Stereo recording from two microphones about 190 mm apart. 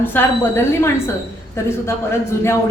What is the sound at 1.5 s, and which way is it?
A man's voice, 15° left (ahead or behind).